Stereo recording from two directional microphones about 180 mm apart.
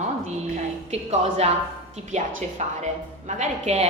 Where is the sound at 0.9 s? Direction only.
35° right (ahead or behind).